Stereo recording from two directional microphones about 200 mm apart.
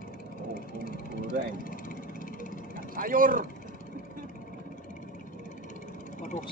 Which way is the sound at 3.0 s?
45° right (ahead or behind).